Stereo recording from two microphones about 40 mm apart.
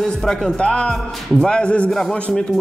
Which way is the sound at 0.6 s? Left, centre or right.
Left.